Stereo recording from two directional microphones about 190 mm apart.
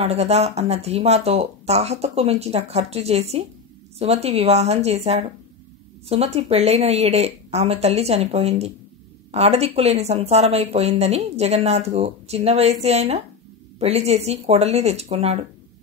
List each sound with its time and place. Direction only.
0.0 s speech: 35° right (ahead or behind)